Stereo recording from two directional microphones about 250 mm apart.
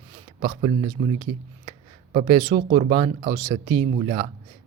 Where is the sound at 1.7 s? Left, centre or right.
Right.